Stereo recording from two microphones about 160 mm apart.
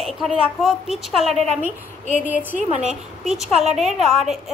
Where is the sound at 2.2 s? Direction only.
10° right (ahead or behind).